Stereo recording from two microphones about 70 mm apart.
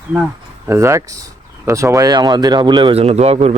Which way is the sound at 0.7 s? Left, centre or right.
Right.